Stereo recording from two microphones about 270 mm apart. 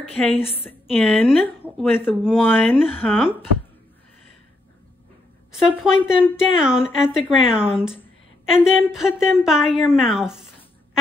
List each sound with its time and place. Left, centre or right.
0.0 s a woman's voice: left
0.7 s speech: centre
5.6 s speech: centre